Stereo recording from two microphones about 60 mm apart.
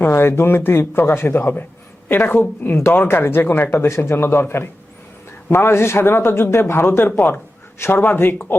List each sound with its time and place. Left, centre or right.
0.1 s a man's voice: left